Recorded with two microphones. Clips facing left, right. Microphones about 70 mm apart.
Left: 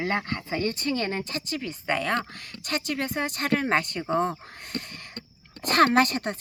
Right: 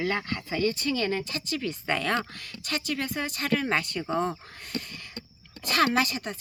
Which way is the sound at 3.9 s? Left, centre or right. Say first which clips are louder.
Left 2 dB; left.